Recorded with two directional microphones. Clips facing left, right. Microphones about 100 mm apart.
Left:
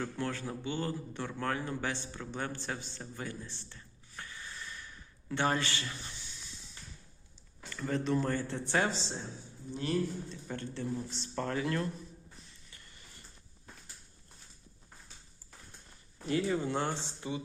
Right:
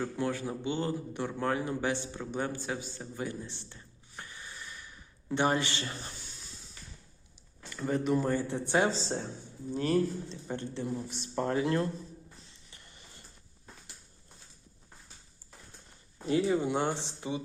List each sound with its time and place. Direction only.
0.0 s a man's voice: 15° right (ahead or behind)
5.8 s a sound: 40° right (ahead or behind)
7.7 s a man's voice: 15° right (ahead or behind)
8.9 s a man's voice: 35° right (ahead or behind)
10.2 s speech: 20° right (ahead or behind)
12.7 s a sound: 25° right (ahead or behind)
16.1 s speech: 25° right (ahead or behind)